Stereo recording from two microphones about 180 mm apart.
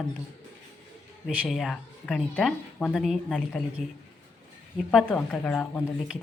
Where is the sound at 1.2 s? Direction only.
Centre (ahead or behind).